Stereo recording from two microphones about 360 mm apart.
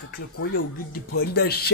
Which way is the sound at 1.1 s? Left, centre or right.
Left.